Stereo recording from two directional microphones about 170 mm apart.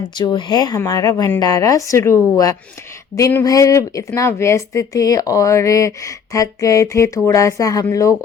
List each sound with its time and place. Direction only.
0.2 s speech: 25° left (ahead or behind)